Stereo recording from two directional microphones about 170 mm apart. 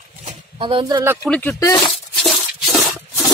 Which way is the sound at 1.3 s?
10° left (ahead or behind).